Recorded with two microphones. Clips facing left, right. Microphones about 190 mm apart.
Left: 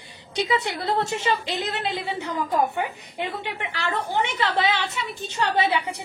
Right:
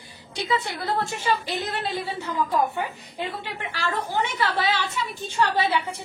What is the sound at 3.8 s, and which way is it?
A woman's voice, 20° left (ahead or behind).